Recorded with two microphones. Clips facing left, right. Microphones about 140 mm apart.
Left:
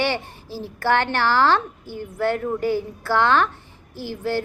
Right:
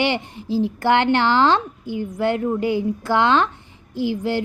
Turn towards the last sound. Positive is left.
turn(degrees=-15)  # may be behind; listen again after turning